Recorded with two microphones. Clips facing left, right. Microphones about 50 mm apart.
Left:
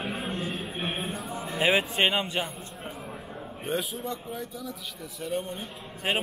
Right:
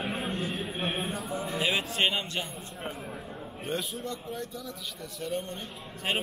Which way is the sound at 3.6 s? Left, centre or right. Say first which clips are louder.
Left 3 dB; centre.